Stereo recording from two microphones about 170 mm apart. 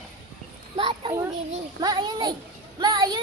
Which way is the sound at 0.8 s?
30° right (ahead or behind).